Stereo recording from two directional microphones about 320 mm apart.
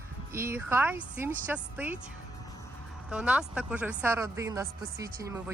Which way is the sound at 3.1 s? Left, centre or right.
Centre.